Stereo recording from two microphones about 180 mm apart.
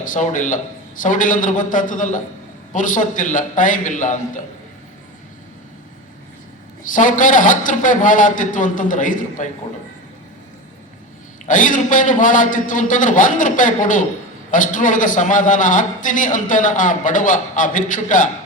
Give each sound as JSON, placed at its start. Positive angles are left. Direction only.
{"t": 0.0, "sound": "a man's voice", "side_deg": 45}
{"t": 6.9, "sound": "a man's voice", "side_deg": 45}
{"t": 11.4, "sound": "a man's voice", "side_deg": 45}